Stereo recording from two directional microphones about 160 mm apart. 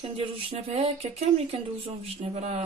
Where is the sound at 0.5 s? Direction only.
40° right (ahead or behind).